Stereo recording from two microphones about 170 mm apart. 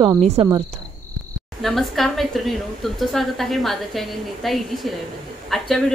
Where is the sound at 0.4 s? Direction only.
35° right (ahead or behind).